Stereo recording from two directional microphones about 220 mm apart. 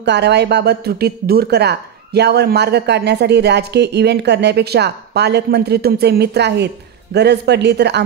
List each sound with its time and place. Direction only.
0.0 s speech: 50° right (ahead or behind)